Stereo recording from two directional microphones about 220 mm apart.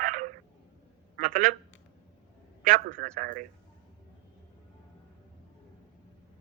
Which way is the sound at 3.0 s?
45° right (ahead or behind).